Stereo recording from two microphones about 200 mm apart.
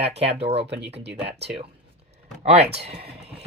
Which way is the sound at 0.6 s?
60° right (ahead or behind).